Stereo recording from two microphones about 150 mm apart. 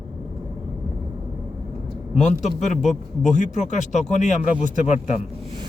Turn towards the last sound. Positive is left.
turn(degrees=55)  # may be behind; listen again after turning